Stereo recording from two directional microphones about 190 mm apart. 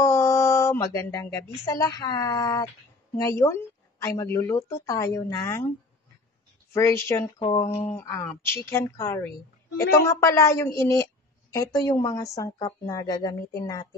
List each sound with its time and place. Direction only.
0.0 s a sound: 15° left (ahead or behind)
1.7 s speech: 15° left (ahead or behind)
6.7 s speech: 15° left (ahead or behind)